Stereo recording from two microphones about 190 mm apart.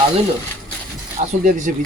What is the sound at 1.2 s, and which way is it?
Speech, 40° right (ahead or behind).